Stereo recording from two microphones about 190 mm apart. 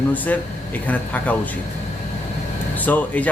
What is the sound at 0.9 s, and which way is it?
Speech, 10° left (ahead or behind).